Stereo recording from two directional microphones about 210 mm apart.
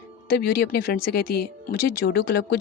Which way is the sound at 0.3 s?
50° left (ahead or behind).